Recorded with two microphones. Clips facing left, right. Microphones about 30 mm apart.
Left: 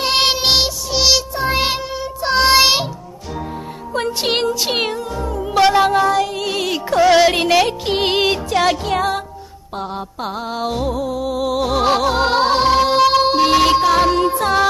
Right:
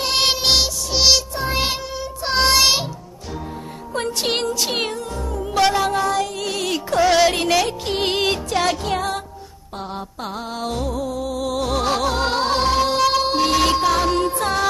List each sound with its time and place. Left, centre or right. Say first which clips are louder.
0.0 s music: left 3 dB; centre
0.9 s music: left 1 dB; centre
1.4 s music: left 4 dB; centre
2.2 s music: left 4 dB; centre
2.5 s music: left 4 dB; centre
3.9 s music: left 3 dB; centre
10.2 s music: left 5 dB; centre